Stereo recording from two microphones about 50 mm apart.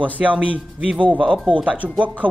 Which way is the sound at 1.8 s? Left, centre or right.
Right.